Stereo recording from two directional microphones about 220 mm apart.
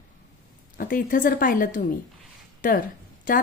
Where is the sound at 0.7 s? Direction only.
40° left (ahead or behind).